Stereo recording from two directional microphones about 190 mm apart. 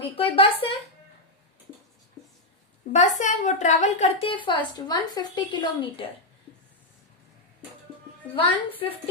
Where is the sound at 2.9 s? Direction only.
40° left (ahead or behind).